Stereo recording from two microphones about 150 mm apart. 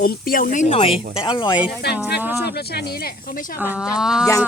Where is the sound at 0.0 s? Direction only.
85° left.